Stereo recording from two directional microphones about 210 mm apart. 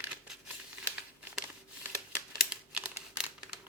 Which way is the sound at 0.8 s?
5° right (ahead or behind).